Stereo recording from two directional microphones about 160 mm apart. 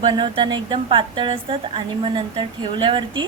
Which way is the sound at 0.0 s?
30° right (ahead or behind).